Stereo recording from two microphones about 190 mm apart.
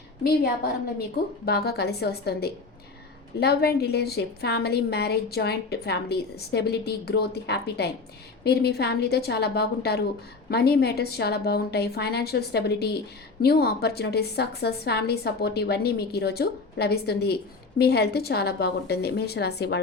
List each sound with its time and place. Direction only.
1.5 s a woman's voice: 55° left (ahead or behind)